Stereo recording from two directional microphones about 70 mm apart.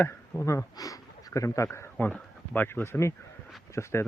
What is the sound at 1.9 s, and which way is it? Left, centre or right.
Speech, left.